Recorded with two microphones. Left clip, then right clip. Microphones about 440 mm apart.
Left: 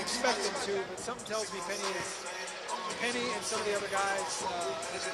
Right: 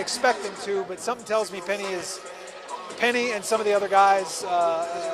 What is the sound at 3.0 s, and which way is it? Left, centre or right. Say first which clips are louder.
A man's voice: right 13 dB; right.